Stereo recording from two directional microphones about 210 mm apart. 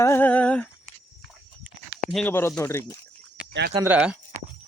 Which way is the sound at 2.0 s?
Centre (ahead or behind).